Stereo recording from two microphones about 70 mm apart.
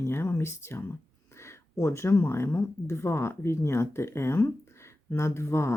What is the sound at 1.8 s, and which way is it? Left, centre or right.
Speech, left.